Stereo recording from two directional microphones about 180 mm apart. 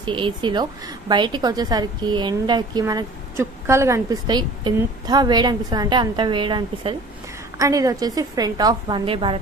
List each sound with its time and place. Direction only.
0.0 s a woman's voice: 25° right (ahead or behind)
7.5 s a woman's voice: 20° right (ahead or behind)